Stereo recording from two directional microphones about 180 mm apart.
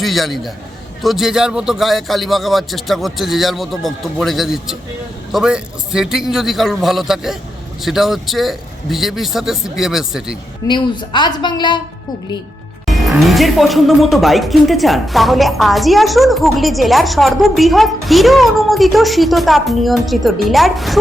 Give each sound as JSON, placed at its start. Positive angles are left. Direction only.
{"t": 0.0, "sound": "speech", "side_deg": 0}
{"t": 10.7, "sound": "speech", "side_deg": 25}
{"t": 12.9, "sound": "speech", "side_deg": 0}